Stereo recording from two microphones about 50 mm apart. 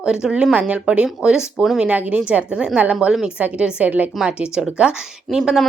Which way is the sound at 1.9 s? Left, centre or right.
Right.